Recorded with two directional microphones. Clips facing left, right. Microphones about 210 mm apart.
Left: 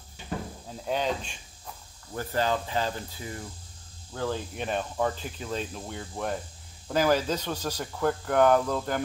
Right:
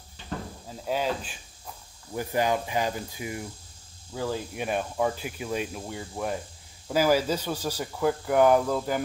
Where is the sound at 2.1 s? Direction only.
15° right (ahead or behind).